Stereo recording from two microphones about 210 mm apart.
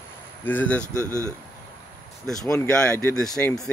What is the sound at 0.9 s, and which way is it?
Speech, 15° right (ahead or behind).